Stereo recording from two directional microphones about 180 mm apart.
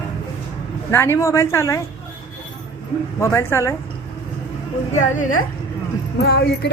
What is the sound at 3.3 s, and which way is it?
Speech, 15° left (ahead or behind).